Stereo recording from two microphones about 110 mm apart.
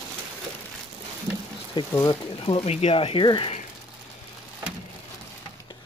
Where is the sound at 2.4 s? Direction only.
60° left (ahead or behind).